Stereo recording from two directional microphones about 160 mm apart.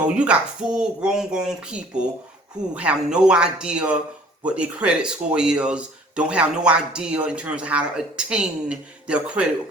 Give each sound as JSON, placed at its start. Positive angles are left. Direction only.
{"t": 0.2, "sound": "speech", "side_deg": -5}